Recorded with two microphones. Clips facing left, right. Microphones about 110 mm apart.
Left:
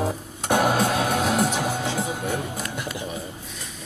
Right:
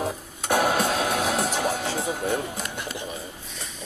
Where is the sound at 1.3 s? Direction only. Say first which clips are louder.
Left 2 dB; 15° left (ahead or behind).